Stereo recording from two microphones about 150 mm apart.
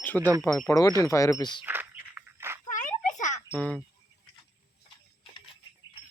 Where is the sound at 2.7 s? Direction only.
55° left (ahead or behind).